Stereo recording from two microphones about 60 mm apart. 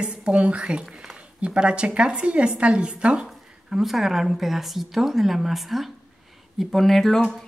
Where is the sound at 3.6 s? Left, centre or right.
Centre.